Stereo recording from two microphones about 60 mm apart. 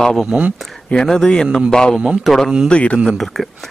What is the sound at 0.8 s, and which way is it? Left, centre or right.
Speech, centre.